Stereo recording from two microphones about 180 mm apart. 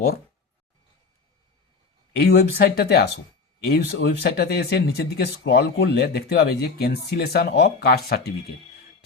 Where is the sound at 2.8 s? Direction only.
60° left (ahead or behind).